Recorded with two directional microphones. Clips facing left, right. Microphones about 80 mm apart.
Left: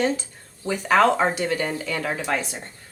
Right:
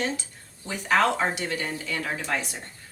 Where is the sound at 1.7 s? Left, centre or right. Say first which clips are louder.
Left 4 dB; left.